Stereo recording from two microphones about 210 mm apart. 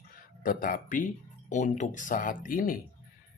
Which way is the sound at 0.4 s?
40° left (ahead or behind).